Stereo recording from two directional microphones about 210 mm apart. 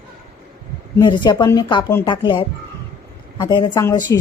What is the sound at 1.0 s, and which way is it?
Speech, 20° left (ahead or behind).